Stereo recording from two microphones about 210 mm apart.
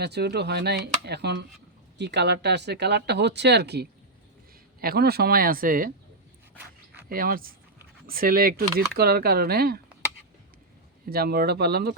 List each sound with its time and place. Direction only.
0.0 s speech: 50° right (ahead or behind)
7.1 s speech: 45° right (ahead or behind)
11.1 s speech: 45° right (ahead or behind)